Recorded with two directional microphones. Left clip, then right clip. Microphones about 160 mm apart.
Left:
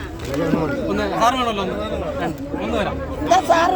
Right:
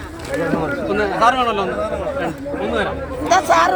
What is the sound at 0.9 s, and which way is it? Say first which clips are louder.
Speech: right 4 dB; 90° left.